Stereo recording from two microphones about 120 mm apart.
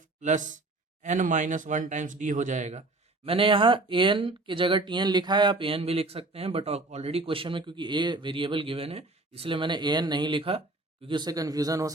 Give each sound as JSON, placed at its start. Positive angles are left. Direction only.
{"t": 0.2, "sound": "speech", "side_deg": -90}
{"t": 3.2, "sound": "speech", "side_deg": -50}